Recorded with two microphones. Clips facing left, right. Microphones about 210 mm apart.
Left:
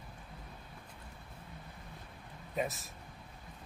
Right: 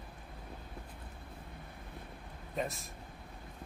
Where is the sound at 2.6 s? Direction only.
Centre (ahead or behind).